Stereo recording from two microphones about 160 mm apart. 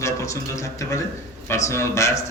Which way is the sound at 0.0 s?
20° left (ahead or behind).